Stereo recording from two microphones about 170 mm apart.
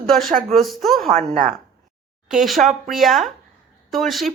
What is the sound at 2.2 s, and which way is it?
Speech, centre (ahead or behind).